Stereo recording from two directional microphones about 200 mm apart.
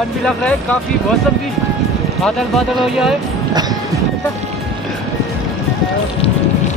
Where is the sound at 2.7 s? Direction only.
Centre (ahead or behind).